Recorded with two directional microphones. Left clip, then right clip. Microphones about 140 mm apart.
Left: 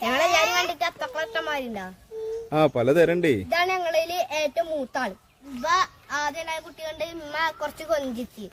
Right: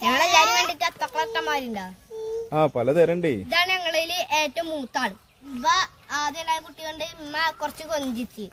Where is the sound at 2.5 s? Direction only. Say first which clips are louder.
Left 1 dB; 35° left (ahead or behind).